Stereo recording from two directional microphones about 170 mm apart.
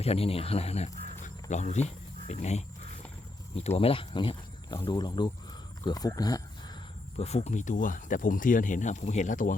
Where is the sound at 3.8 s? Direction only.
30° left (ahead or behind).